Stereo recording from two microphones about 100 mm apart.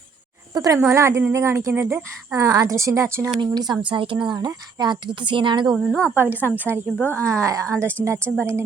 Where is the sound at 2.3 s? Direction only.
35° right (ahead or behind).